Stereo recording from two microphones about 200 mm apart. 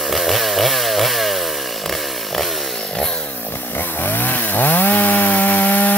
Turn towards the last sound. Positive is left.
turn(degrees=10)  # may be behind; listen again after turning